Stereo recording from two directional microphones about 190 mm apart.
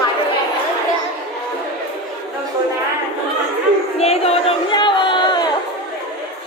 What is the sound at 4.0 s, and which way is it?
Crowd, 35° left (ahead or behind).